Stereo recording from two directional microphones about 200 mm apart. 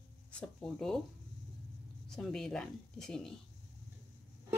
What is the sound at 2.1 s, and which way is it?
Speech, centre (ahead or behind).